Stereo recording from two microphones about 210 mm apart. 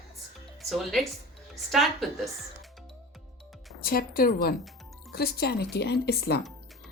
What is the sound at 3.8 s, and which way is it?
Speech, 45° left (ahead or behind).